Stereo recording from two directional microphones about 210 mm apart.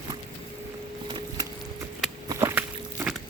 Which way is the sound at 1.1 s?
20° right (ahead or behind).